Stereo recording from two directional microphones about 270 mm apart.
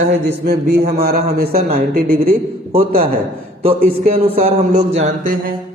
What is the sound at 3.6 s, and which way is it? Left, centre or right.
Speech, right.